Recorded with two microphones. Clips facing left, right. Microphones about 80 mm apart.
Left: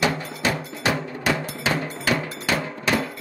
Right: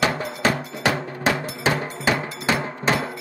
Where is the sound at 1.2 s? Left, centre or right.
Right.